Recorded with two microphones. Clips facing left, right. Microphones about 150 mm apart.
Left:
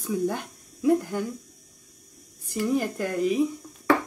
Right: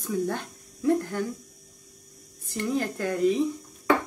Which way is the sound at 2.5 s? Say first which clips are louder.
Left 2 dB; 10° left (ahead or behind).